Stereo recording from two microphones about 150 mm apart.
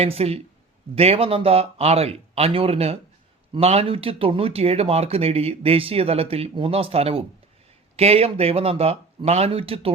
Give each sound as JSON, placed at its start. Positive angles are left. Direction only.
{"t": 0.0, "sound": "speech", "side_deg": -40}